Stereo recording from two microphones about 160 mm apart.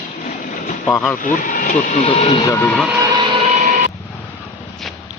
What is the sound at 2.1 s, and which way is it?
Speech, 40° left (ahead or behind).